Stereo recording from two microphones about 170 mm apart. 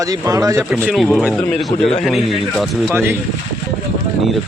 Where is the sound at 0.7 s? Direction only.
5° right (ahead or behind).